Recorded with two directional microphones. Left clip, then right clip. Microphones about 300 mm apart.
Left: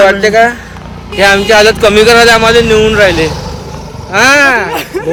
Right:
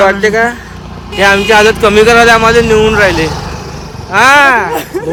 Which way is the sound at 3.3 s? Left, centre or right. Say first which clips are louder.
Right 1 dB; centre.